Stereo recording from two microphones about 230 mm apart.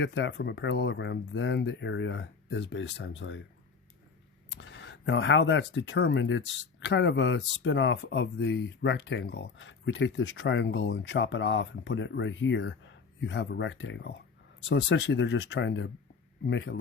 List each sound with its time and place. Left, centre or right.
0.0 s speech: left
4.6 s speech: left